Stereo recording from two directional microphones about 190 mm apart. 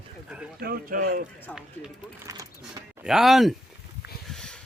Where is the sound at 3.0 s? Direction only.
Centre (ahead or behind).